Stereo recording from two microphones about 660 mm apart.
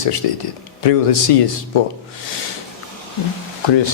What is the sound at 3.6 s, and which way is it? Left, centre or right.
Speech, left.